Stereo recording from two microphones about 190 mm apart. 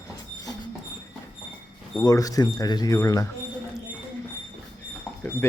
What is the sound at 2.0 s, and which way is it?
Speech, 20° left (ahead or behind).